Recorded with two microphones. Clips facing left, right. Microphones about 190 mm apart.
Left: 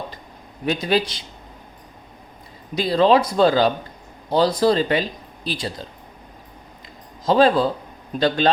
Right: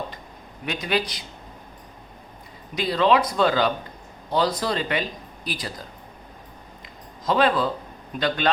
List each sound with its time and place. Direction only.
0.6 s speech: 35° left (ahead or behind)
2.7 s speech: 30° left (ahead or behind)
7.3 s speech: 30° left (ahead or behind)